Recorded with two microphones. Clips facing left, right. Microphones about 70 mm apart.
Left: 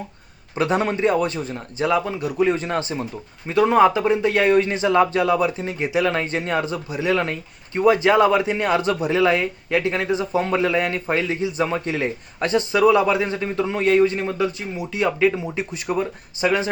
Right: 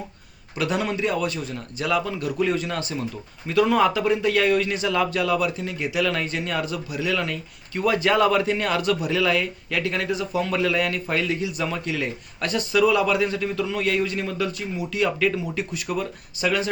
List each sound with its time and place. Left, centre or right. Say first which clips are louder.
0.5 s a man's voice: left 4 dB; left